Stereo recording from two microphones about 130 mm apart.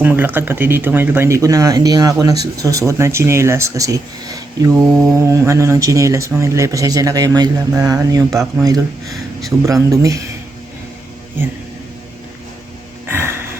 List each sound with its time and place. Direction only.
0.0 s speech: 15° right (ahead or behind)
13.1 s music: 15° right (ahead or behind)